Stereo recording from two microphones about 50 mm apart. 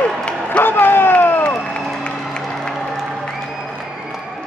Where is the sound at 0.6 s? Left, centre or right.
Left.